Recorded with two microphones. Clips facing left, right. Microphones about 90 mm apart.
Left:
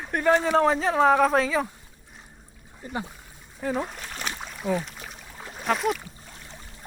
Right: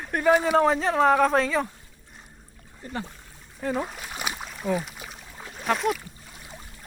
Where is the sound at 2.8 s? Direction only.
15° left (ahead or behind).